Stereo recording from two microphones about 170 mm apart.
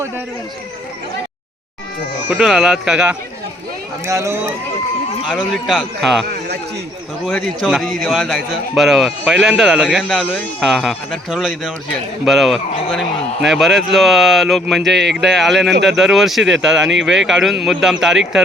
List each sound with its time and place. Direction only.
2.3 s a man's voice: centre (ahead or behind)
4.0 s speech: 15° right (ahead or behind)
5.2 s a man's voice: 5° right (ahead or behind)
7.3 s a man's voice: centre (ahead or behind)
15.7 s speech: 90° right
16.0 s a man's voice: centre (ahead or behind)